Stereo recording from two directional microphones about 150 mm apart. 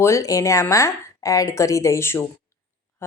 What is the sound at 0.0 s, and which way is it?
A woman's voice, 20° left (ahead or behind).